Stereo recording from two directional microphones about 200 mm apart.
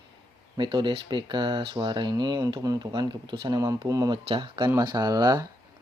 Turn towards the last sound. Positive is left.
turn(degrees=-20)  # may be behind; listen again after turning